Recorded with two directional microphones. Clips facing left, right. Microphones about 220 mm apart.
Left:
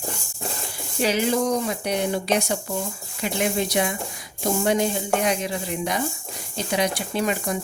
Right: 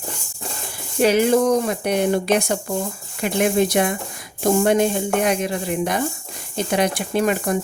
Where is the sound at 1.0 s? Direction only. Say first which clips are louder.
Right 6 dB; 55° right (ahead or behind).